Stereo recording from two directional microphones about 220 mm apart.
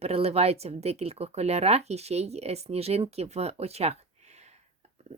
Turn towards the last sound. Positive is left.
turn(degrees=-30)  # may be behind; listen again after turning